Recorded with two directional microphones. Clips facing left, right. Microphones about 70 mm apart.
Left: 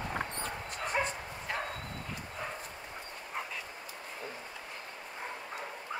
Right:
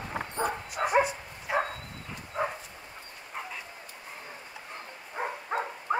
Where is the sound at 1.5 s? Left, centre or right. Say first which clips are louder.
Right 9 dB; centre.